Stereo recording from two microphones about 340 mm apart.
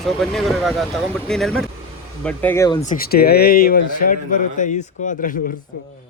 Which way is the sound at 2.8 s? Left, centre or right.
Left.